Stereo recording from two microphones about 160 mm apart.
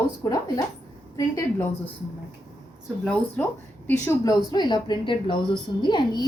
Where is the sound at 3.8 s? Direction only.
15° left (ahead or behind).